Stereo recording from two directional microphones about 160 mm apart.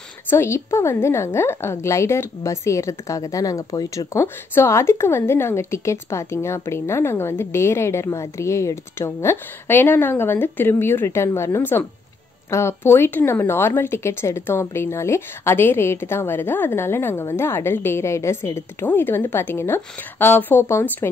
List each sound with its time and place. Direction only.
0.3 s a woman's voice: 15° left (ahead or behind)